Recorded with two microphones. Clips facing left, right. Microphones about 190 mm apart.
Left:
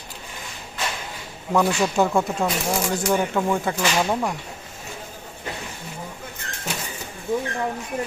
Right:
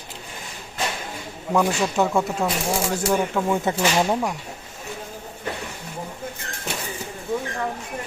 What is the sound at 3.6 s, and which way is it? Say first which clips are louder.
Speech: right 2 dB; 25° right (ahead or behind).